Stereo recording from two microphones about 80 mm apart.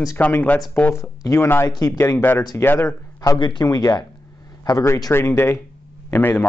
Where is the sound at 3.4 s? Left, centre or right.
Left.